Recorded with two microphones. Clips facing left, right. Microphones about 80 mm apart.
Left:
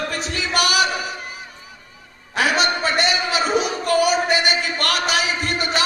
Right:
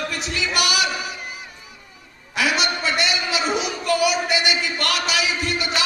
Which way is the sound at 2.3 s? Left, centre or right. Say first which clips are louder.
Left 3 dB; left.